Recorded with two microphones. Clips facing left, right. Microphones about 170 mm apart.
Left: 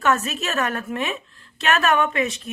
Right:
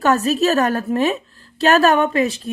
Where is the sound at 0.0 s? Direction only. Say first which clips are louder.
Right 6 dB; 35° right (ahead or behind).